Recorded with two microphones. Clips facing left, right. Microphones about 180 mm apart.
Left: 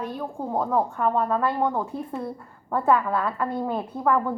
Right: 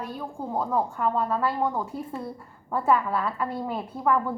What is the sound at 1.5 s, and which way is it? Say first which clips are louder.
Speech: left 2 dB; 20° left (ahead or behind).